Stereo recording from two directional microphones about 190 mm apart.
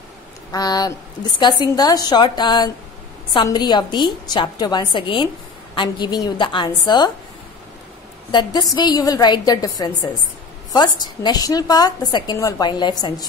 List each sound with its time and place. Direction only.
0.5 s a woman's voice: 20° left (ahead or behind)
8.3 s a woman's voice: 20° left (ahead or behind)